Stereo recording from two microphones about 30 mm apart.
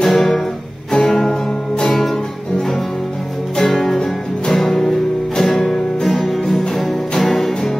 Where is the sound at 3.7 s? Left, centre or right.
Centre.